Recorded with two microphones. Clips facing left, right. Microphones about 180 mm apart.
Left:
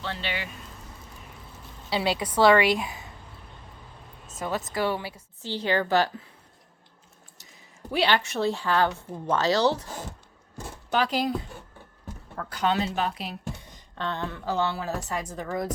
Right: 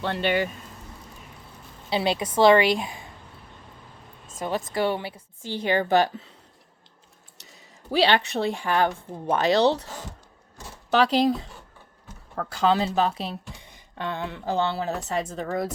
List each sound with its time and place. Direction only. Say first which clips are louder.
0.0 s speech: right 9 dB; 55° right (ahead or behind)
1.9 s a woman's voice: right 2 dB; 25° right (ahead or behind)
4.4 s a woman's voice: right 2 dB; 25° right (ahead or behind)
5.5 s a woman's voice: right 2 dB; 15° right (ahead or behind)
7.9 s a woman's voice: right 3 dB; 25° right (ahead or behind)
9.6 s speech: right 5 dB; 65° right (ahead or behind)
10.9 s a woman's voice: right 5 dB; 25° right (ahead or behind)
12.7 s speech: right 4 dB; 30° right (ahead or behind)
13.6 s a woman's voice: even; 15° right (ahead or behind)